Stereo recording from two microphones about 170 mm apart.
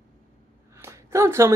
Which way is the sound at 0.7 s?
15° right (ahead or behind).